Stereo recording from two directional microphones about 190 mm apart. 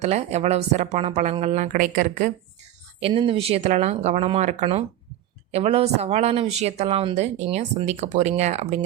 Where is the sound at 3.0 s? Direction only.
30° right (ahead or behind).